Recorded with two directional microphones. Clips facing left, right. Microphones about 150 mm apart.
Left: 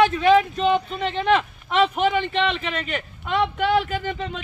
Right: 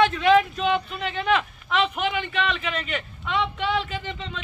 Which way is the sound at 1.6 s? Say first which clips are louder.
Left 5 dB; 35° left (ahead or behind).